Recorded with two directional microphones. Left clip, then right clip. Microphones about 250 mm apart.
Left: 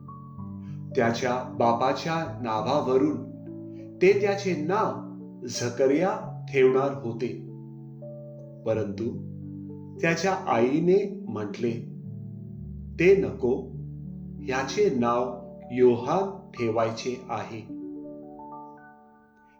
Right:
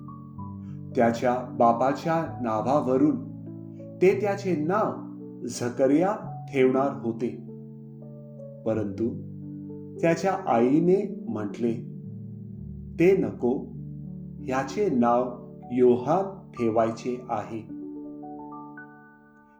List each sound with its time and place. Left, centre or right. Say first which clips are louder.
0.9 s speech: right 2 dB; right
8.6 s speech: even; right
13.0 s speech: left 1 dB; right